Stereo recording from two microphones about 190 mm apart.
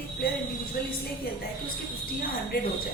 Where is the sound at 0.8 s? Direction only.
50° left (ahead or behind).